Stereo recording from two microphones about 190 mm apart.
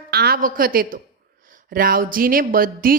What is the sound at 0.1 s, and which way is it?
A woman's voice, 55° right (ahead or behind).